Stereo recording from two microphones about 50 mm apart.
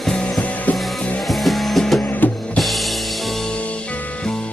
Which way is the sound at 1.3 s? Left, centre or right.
Centre.